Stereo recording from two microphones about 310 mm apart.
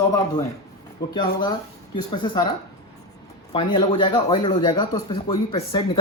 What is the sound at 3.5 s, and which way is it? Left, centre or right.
Speech, centre.